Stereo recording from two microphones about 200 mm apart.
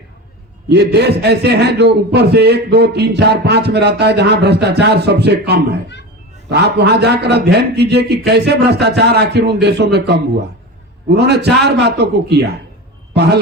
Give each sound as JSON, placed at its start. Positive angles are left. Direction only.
{"t": 0.7, "sound": "a man's voice", "side_deg": -55}